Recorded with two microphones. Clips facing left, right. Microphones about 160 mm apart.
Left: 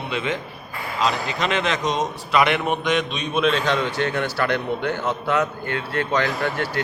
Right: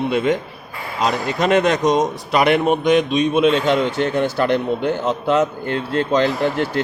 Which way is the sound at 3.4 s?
20° right (ahead or behind).